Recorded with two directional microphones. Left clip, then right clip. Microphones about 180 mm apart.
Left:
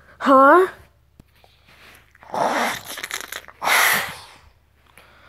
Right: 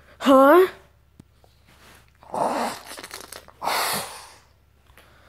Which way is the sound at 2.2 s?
5° left (ahead or behind).